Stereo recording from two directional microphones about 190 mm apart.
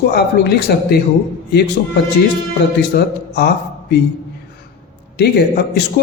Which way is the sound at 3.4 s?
60° left (ahead or behind).